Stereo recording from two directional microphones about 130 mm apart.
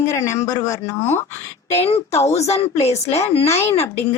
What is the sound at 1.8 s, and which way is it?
A woman's voice, 50° left (ahead or behind).